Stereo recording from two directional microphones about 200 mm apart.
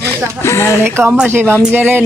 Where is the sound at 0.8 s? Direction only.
10° right (ahead or behind).